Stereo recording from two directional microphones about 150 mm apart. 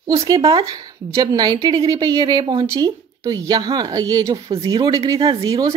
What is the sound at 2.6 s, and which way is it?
Speech, 20° right (ahead or behind).